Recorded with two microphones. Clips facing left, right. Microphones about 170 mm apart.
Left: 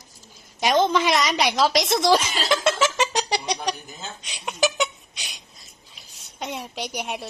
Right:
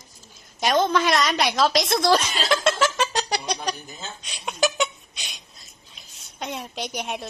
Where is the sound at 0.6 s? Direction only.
15° left (ahead or behind).